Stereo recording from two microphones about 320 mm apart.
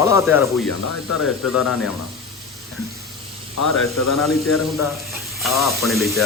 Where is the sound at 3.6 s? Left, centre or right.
Left.